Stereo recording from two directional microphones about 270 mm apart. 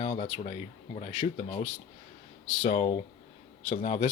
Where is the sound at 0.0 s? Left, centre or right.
Centre.